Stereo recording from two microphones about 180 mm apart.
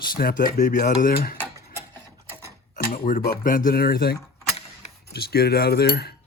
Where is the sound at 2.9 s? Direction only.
50° left (ahead or behind).